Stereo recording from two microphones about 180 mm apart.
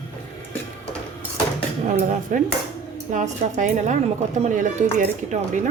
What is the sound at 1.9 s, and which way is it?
A woman's voice, 45° right (ahead or behind).